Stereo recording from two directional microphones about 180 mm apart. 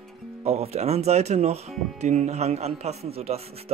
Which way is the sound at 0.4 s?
35° right (ahead or behind).